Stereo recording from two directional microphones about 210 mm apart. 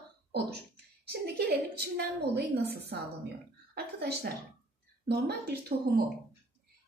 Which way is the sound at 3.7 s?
50° right (ahead or behind).